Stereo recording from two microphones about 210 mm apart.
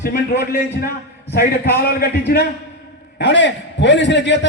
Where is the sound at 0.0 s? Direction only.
50° left (ahead or behind).